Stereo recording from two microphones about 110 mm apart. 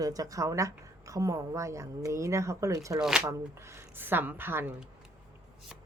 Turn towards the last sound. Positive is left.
turn(degrees=-20)  # may be behind; listen again after turning